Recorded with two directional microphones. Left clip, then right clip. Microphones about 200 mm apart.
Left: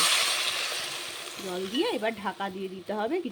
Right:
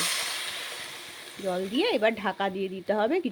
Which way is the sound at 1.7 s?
20° right (ahead or behind).